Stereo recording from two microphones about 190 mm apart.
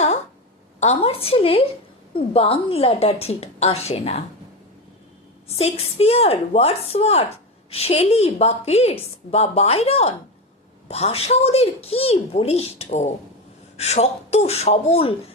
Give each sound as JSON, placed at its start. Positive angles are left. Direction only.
{"t": 0.8, "sound": "a woman's voice", "side_deg": 30}
{"t": 5.5, "sound": "a woman's voice", "side_deg": 35}